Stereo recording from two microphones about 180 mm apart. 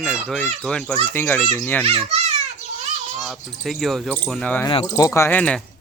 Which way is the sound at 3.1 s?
Centre (ahead or behind).